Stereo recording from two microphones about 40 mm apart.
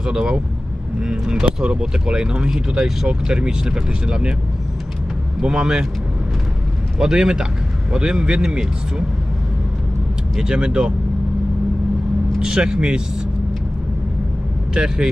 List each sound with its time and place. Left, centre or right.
0.0 s speech: centre
5.4 s speech: centre
7.0 s speech: centre
10.3 s speech: centre
12.4 s speech: centre
14.7 s speech: centre